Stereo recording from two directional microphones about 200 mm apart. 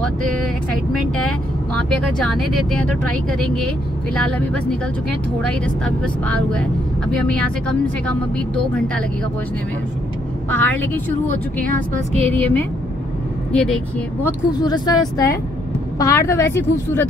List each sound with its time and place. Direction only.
0.9 s vehicle: 5° left (ahead or behind)
1.8 s speech: 5° left (ahead or behind)
10.5 s speech: 10° left (ahead or behind)
12.4 s speech: 10° left (ahead or behind)
14.2 s speech: 20° left (ahead or behind)